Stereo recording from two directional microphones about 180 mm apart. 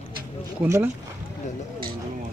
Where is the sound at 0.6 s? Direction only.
15° right (ahead or behind).